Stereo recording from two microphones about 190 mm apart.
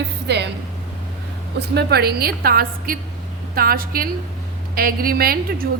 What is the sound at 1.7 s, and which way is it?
A woman's voice, 55° right (ahead or behind).